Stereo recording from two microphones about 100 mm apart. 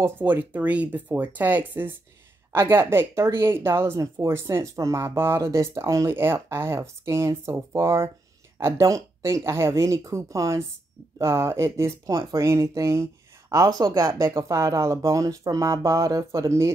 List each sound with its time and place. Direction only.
0.0 s speech: 20° right (ahead or behind)